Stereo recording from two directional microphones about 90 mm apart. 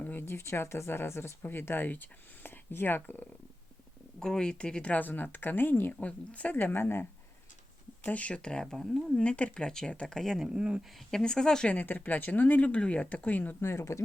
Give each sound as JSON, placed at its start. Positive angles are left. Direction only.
{"t": 0.0, "sound": "speech", "side_deg": 25}
{"t": 4.2, "sound": "speech", "side_deg": 10}
{"t": 9.2, "sound": "speech", "side_deg": 15}
{"t": 11.1, "sound": "speech", "side_deg": 10}
{"t": 11.8, "sound": "speech", "side_deg": 20}
{"t": 13.6, "sound": "speech", "side_deg": 30}